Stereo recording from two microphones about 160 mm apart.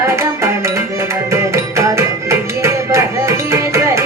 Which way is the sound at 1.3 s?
15° right (ahead or behind).